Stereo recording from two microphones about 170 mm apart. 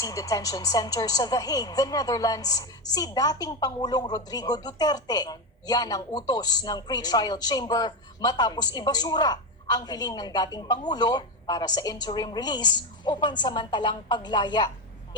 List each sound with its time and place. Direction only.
0.0 s speech: 20° left (ahead or behind)